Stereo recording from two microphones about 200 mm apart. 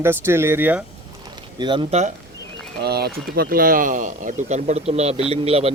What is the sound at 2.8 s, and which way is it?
A man's voice, 55° right (ahead or behind).